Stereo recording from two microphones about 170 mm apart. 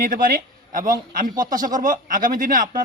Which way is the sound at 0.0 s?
55° right (ahead or behind).